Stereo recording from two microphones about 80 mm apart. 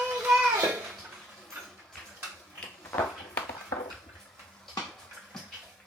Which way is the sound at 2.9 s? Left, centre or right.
Left.